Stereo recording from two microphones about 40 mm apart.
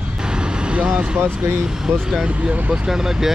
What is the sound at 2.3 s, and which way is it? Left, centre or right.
Speech, right.